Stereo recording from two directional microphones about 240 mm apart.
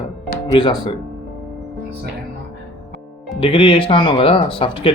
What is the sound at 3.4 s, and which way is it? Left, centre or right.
Speech, left.